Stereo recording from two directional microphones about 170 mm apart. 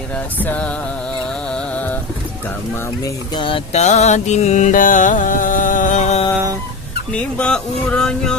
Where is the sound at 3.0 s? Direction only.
30° left (ahead or behind).